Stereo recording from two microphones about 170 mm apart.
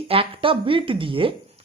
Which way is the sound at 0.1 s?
30° right (ahead or behind).